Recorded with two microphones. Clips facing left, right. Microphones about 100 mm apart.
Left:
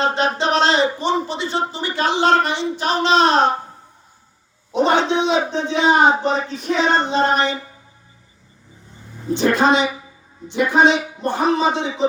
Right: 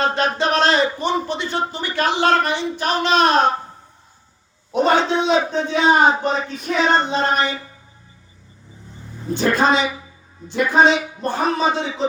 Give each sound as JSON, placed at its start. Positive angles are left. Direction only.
{"t": 0.0, "sound": "speech", "side_deg": 25}
{"t": 4.7, "sound": "speech", "side_deg": 20}
{"t": 9.3, "sound": "a woman's voice", "side_deg": 20}